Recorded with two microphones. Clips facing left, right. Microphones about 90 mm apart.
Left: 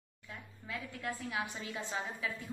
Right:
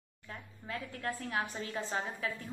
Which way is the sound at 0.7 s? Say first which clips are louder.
Right 2 dB; 40° right (ahead or behind).